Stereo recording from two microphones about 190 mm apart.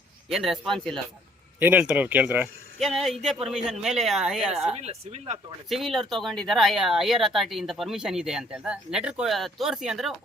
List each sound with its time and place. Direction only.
0.3 s speech: centre (ahead or behind)
4.7 s speech: 35° right (ahead or behind)
5.6 s speech: centre (ahead or behind)